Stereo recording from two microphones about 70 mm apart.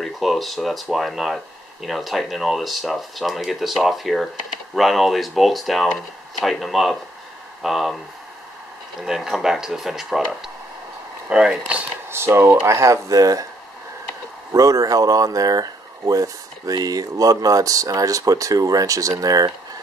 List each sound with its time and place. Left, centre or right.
0.0 s speech: centre
9.0 s speech: centre
12.1 s speech: right
14.5 s speech: right